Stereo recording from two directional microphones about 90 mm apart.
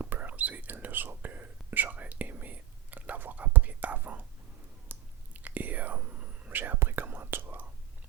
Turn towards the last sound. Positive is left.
turn(degrees=-25)  # may be behind; listen again after turning